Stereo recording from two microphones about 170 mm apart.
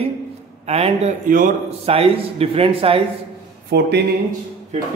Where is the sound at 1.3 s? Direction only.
55° right (ahead or behind).